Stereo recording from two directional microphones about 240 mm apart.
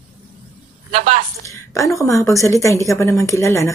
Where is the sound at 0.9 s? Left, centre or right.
Right.